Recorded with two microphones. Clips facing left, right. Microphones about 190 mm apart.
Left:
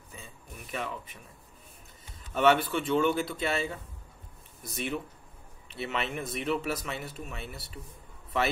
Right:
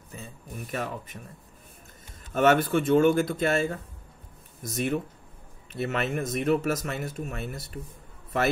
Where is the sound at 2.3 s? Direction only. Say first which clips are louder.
Right 3 dB; 45° right (ahead or behind).